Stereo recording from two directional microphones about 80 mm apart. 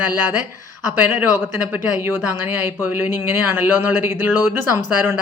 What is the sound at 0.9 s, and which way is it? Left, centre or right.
A woman's voice, right.